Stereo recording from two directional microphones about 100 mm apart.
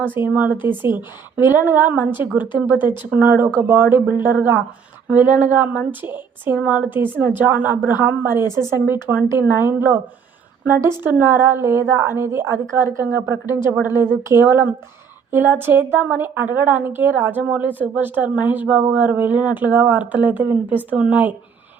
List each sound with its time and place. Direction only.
0.0 s a woman's voice: 20° right (ahead or behind)